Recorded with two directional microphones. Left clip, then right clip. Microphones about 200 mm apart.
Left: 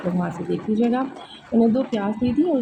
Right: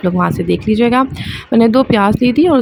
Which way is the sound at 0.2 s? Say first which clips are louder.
Right 11 dB; 55° right (ahead or behind).